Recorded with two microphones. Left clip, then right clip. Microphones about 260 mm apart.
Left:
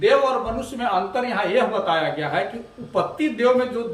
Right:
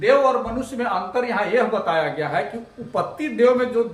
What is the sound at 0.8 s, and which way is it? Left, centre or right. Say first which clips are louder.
A man's voice: even; centre.